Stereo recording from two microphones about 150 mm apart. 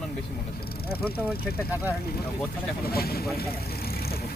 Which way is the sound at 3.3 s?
90° left.